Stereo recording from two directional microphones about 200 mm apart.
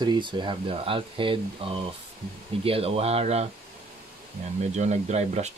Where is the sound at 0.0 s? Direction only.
20° right (ahead or behind).